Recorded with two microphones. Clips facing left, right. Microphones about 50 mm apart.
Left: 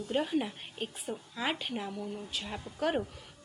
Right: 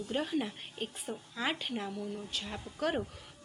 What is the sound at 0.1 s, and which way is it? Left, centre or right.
A woman's voice, centre.